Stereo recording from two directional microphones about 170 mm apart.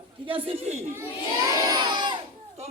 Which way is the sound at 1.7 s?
25° right (ahead or behind).